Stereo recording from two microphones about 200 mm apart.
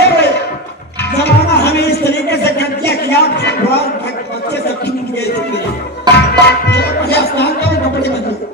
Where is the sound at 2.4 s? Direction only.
55° left (ahead or behind).